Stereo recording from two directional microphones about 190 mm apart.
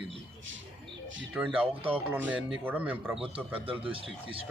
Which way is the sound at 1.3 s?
5° right (ahead or behind).